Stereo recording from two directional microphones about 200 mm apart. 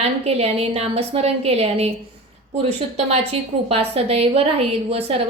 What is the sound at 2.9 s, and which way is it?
A woman's voice, 30° right (ahead or behind).